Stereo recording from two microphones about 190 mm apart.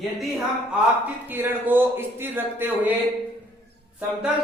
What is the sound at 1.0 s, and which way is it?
A man's voice, 10° right (ahead or behind).